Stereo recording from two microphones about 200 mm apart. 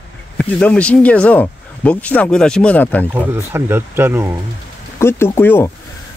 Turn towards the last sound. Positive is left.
turn(degrees=10)  # may be behind; listen again after turning